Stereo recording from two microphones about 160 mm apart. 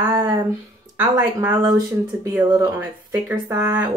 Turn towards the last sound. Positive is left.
turn(degrees=-15)  # may be behind; listen again after turning